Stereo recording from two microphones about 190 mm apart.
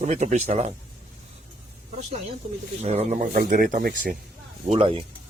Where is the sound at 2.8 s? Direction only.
35° right (ahead or behind).